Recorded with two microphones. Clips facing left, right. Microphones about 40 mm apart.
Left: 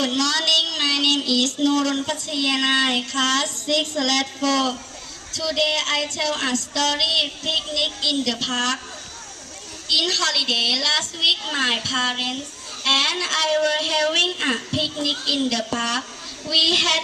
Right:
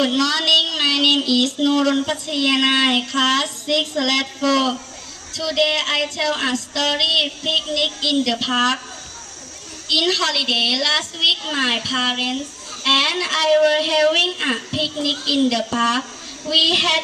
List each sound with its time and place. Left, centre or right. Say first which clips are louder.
0.0 s a woman's voice: right 3 dB; centre
9.9 s a woman's voice: right 3 dB; centre